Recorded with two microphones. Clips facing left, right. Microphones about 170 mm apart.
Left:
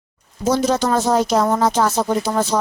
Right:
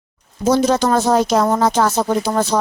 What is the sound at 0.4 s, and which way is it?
Speech, 65° right (ahead or behind).